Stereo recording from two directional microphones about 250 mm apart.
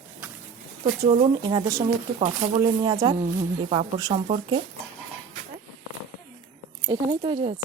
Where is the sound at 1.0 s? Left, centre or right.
Right.